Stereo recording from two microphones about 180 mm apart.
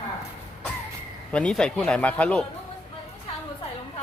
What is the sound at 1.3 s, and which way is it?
Speech, 5° left (ahead or behind).